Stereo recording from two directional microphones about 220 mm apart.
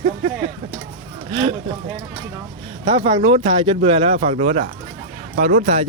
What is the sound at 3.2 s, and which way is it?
Speech, 30° right (ahead or behind).